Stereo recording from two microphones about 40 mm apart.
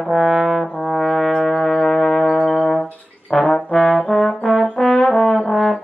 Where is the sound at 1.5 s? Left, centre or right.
Left.